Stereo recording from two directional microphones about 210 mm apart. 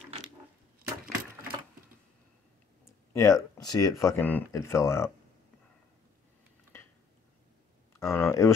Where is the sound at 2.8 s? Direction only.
15° left (ahead or behind).